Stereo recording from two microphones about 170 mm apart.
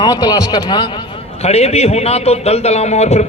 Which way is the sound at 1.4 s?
35° left (ahead or behind).